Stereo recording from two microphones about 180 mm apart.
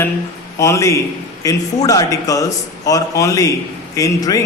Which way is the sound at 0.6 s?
15° left (ahead or behind).